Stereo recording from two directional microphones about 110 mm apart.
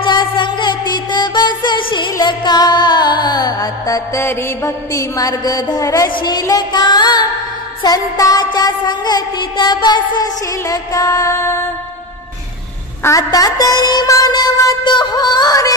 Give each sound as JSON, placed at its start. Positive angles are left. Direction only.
{"t": 0.0, "sound": "music", "side_deg": 45}
{"t": 4.2, "sound": "music", "side_deg": 20}
{"t": 6.0, "sound": "a woman's voice", "side_deg": 40}
{"t": 6.4, "sound": "music", "side_deg": 35}
{"t": 13.0, "sound": "music", "side_deg": 30}